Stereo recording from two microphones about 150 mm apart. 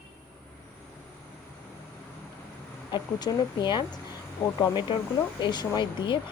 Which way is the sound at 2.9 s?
30° left (ahead or behind).